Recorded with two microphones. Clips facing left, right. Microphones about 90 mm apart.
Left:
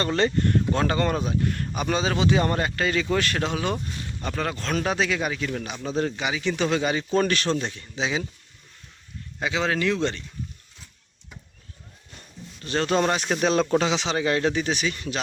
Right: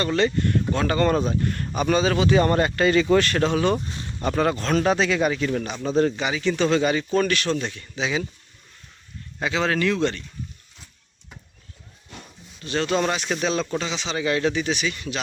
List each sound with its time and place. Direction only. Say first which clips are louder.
0.0 s speech: right 1 dB; 30° left (ahead or behind)
0.9 s speech: right 3 dB; 15° left (ahead or behind)
2.5 s speech: right 5 dB; centre (ahead or behind)
4.2 s speech: right 7 dB; 10° right (ahead or behind); by 7.0 s 15° left (ahead or behind)
7.1 s speech: right 1 dB; 30° left (ahead or behind)
9.4 s speech: right 2 dB; 15° left (ahead or behind)
12.6 s speech: even; 40° left (ahead or behind)
13.4 s speech: left 7 dB; 55° left (ahead or behind); by 14.2 s 75° left (ahead or behind)
14.2 s speech: right 3 dB; 35° left (ahead or behind)